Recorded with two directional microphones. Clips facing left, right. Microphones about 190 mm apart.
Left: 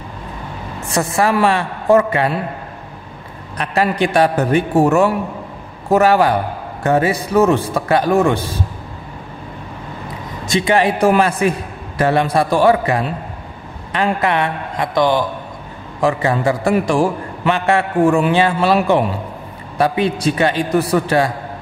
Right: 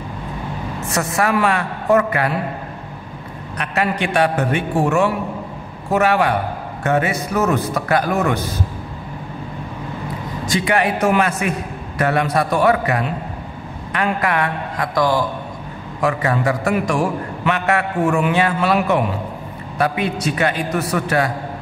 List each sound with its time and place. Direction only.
0.9 s a man's voice: 30° left (ahead or behind)
3.5 s a man's voice: 35° left (ahead or behind)
10.4 s a man's voice: 25° left (ahead or behind)